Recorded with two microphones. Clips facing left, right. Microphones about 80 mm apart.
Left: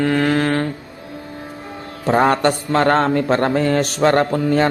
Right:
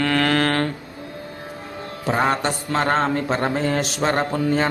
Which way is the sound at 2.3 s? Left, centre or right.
Left.